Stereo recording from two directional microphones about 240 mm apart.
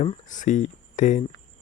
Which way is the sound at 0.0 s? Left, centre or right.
Left.